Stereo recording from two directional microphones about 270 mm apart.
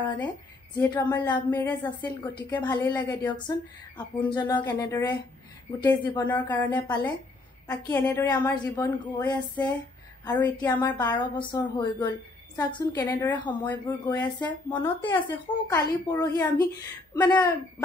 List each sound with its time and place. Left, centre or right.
0.7 s speech: centre